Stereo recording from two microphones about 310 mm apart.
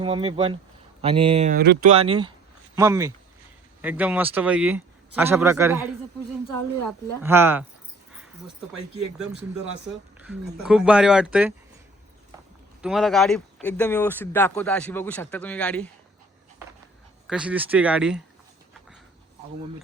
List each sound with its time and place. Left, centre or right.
0.0 s speech: centre
2.0 s speech: centre
7.2 s speech: centre
9.8 s speech: centre
12.8 s speech: centre
17.2 s speech: centre